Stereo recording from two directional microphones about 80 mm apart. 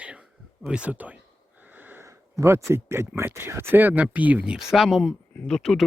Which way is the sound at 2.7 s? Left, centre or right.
Right.